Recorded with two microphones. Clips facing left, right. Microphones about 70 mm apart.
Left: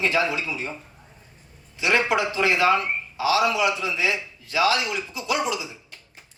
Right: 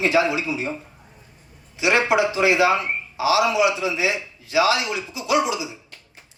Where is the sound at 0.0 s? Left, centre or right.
Right.